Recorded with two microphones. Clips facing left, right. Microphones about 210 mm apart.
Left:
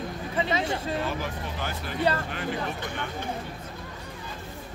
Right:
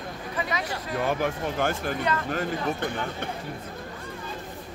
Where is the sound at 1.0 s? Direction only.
50° right (ahead or behind).